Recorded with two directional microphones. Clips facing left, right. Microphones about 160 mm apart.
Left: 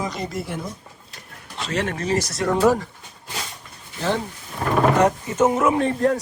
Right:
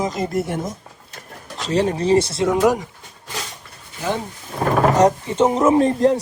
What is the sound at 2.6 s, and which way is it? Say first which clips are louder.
Speech: left 1 dB; 15° right (ahead or behind).